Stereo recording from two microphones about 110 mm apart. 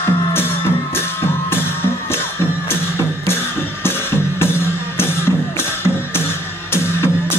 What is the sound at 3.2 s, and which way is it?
Music, 20° left (ahead or behind).